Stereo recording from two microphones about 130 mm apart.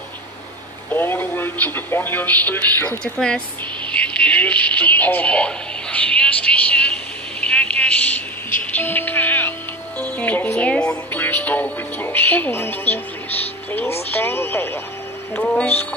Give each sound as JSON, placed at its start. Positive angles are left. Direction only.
{"t": 0.8, "sound": "a sound", "side_deg": 15}
{"t": 2.8, "sound": "speech", "side_deg": 15}
{"t": 4.2, "sound": "radio", "side_deg": 10}
{"t": 7.3, "sound": "a sound", "side_deg": 10}
{"t": 8.7, "sound": "music", "side_deg": 15}
{"t": 9.9, "sound": "speech", "side_deg": 10}